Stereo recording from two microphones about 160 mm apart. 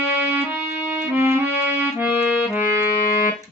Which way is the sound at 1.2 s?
15° right (ahead or behind).